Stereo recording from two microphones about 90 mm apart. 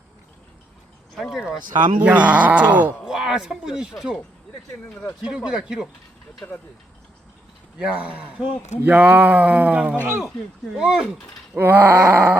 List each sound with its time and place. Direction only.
1.1 s speech: centre (ahead or behind)
2.0 s speech: 15° right (ahead or behind)
3.0 s speech: 5° right (ahead or behind)
5.2 s speech: 10° right (ahead or behind)
7.8 s speech: 15° right (ahead or behind)
10.0 s groan: 25° right (ahead or behind)
10.8 s speech: 10° right (ahead or behind)
11.5 s groan: 25° right (ahead or behind)